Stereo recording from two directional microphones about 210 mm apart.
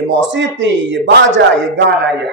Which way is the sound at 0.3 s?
60° right (ahead or behind).